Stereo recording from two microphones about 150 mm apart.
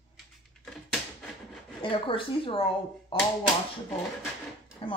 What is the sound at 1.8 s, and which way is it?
Speech, 35° left (ahead or behind).